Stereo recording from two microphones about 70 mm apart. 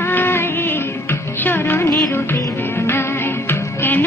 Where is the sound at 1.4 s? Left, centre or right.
Left.